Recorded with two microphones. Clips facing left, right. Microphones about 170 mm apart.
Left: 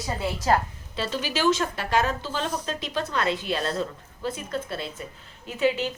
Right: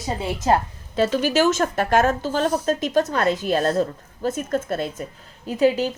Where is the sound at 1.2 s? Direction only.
45° right (ahead or behind).